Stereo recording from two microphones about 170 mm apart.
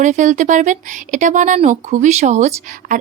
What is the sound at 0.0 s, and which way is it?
A woman's voice, 45° right (ahead or behind).